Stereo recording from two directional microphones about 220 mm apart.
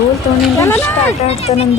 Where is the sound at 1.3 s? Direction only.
30° left (ahead or behind).